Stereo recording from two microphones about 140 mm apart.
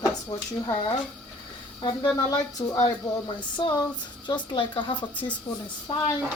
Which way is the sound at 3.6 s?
35° left (ahead or behind).